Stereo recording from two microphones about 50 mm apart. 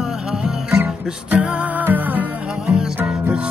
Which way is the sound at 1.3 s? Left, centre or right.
Right.